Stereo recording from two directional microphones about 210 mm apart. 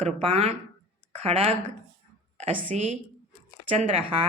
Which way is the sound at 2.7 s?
30° right (ahead or behind).